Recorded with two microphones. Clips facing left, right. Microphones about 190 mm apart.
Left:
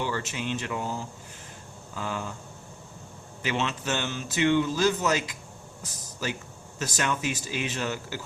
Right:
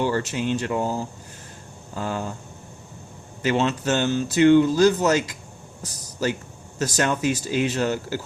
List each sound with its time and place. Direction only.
0.0 s a man's voice: 40° right (ahead or behind)
3.4 s speech: 45° right (ahead or behind)
6.7 s a man's voice: 40° right (ahead or behind)